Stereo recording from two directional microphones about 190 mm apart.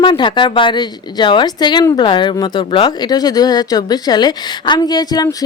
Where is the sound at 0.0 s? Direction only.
25° left (ahead or behind).